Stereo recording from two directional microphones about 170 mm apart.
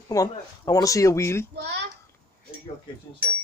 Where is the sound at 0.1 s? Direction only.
20° left (ahead or behind).